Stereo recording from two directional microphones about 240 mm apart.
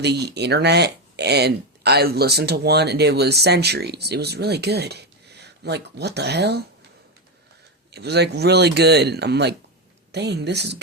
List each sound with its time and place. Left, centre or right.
0.0 s speech: right
7.9 s speech: right